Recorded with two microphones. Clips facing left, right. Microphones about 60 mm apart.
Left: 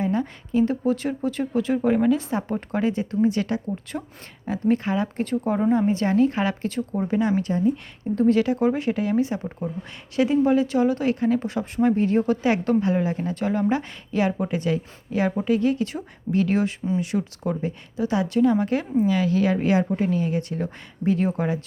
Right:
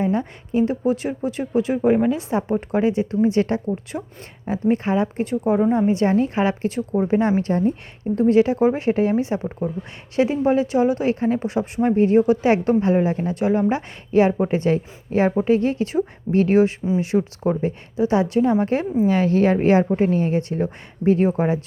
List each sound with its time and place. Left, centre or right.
0.0 s speech: right
4.0 s speech: centre
4.4 s speech: right
5.9 s speech: right
7.4 s speech: right
8.1 s speech: right
12.4 s speech: right